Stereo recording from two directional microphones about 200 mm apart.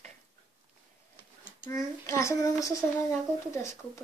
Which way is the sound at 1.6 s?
15° left (ahead or behind).